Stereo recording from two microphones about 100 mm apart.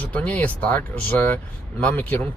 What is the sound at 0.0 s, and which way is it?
Speech, 15° left (ahead or behind).